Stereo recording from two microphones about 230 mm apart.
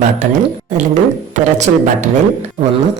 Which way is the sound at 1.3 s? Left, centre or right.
Right.